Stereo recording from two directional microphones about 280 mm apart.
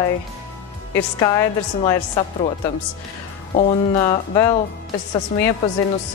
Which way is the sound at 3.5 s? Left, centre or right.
Centre.